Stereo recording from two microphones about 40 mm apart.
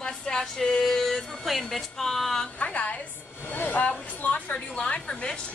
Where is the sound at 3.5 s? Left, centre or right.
Left.